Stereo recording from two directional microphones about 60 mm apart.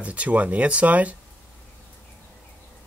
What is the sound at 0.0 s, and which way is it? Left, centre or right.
Speech, right.